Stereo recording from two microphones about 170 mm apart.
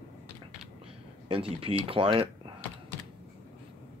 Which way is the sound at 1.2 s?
35° right (ahead or behind).